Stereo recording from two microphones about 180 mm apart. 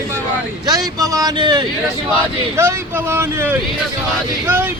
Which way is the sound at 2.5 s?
15° right (ahead or behind).